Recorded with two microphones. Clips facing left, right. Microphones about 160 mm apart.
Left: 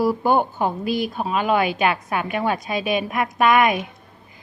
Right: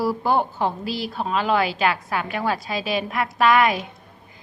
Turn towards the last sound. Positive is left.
turn(degrees=20)  # may be behind; listen again after turning